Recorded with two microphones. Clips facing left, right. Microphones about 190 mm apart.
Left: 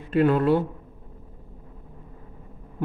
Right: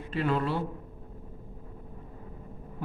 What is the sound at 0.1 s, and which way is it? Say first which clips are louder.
Speech: left 9 dB; 50° left (ahead or behind).